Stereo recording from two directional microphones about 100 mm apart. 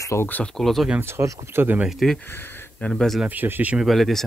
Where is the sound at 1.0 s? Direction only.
25° right (ahead or behind).